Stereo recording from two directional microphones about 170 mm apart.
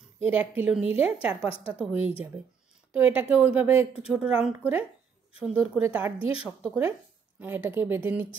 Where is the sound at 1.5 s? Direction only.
35° left (ahead or behind).